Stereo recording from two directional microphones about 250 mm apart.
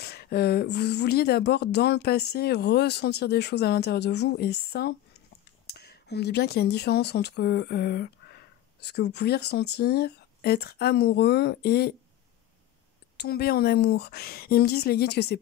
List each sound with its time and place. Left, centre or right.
0.0 s speech: left
13.2 s speech: left